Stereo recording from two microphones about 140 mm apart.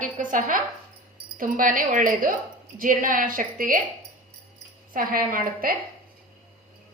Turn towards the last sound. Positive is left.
turn(degrees=-90)